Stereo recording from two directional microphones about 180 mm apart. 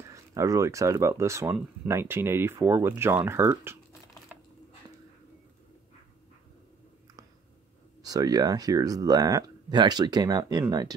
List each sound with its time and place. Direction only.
0.0 s speech: 15° right (ahead or behind)
8.0 s speech: 20° right (ahead or behind)